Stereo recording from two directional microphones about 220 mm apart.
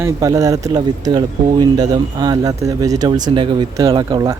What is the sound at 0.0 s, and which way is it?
Speech, 15° right (ahead or behind).